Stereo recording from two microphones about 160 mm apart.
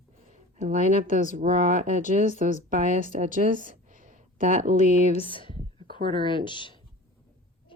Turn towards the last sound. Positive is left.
turn(degrees=30)  # may be behind; listen again after turning